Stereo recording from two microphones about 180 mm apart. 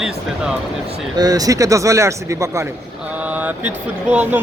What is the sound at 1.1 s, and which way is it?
Speech, 20° right (ahead or behind).